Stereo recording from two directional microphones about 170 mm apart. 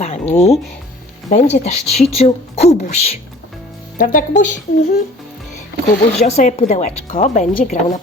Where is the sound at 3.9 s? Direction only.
55° left (ahead or behind).